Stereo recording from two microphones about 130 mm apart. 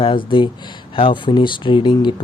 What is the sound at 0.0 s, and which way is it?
Speech, 40° left (ahead or behind).